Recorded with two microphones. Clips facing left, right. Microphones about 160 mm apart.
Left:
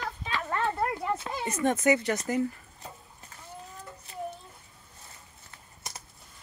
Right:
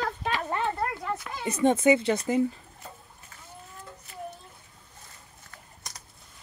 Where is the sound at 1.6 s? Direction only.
25° right (ahead or behind).